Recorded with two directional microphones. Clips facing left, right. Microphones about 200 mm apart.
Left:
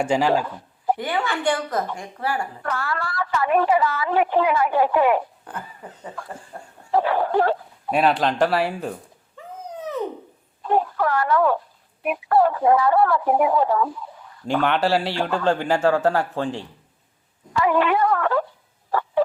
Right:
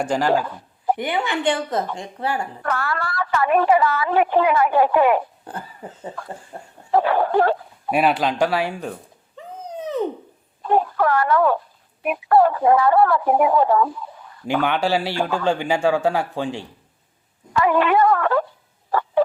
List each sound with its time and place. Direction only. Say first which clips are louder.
0.0 s speech: left 1 dB; 10° left (ahead or behind)
0.9 s speech: right 2 dB; 20° right (ahead or behind)
2.6 s a woman's voice: right 4 dB; 60° right (ahead or behind)
5.5 s speech: right 2 dB; 30° right (ahead or behind)
6.9 s a woman's voice: right 2 dB; 60° right (ahead or behind)
7.9 s speech: even; 5° right (ahead or behind)
9.4 s a sound: right 2 dB; 20° right (ahead or behind)
10.7 s a woman's voice: right 2 dB; 60° right (ahead or behind)
14.4 s speech: even; 5° right (ahead or behind)
17.6 s a woman's voice: right 2 dB; 60° right (ahead or behind)
18.9 s fowl: right 2 dB; 65° right (ahead or behind)